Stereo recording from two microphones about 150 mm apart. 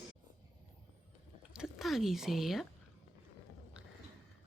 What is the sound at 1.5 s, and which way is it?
Speech, centre (ahead or behind).